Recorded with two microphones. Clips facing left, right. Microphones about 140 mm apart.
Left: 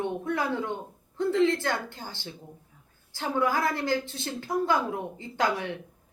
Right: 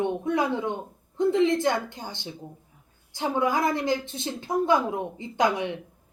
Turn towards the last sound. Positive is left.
turn(degrees=-20)  # may be behind; listen again after turning